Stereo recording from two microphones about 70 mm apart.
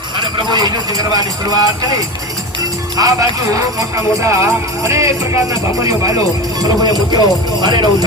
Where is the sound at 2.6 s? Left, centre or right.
Right.